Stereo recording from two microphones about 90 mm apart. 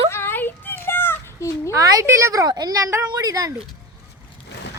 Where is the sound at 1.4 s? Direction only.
35° left (ahead or behind).